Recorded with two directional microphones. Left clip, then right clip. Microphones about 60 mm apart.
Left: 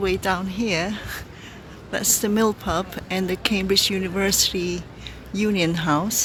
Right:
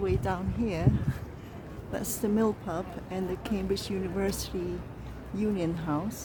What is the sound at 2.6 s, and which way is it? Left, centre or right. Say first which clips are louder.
Speech: left 10 dB; left.